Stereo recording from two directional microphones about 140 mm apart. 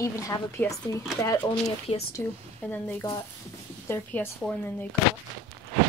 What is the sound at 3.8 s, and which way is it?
Speech, 15° left (ahead or behind).